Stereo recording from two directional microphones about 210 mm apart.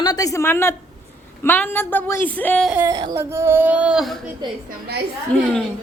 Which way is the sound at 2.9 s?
20° right (ahead or behind).